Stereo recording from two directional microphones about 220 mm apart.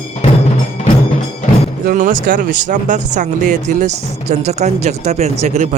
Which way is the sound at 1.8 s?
35° right (ahead or behind).